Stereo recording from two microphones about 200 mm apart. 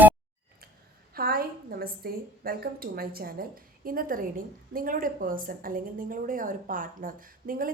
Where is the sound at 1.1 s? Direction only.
50° right (ahead or behind).